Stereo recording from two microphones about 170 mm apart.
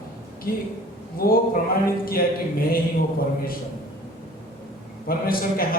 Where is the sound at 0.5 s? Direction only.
60° left (ahead or behind).